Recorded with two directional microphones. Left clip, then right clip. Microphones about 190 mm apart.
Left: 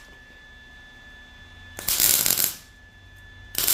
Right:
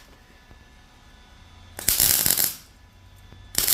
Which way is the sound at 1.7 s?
Centre (ahead or behind).